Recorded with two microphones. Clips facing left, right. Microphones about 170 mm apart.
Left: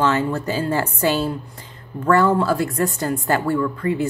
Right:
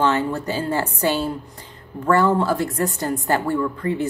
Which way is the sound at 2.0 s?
20° right (ahead or behind).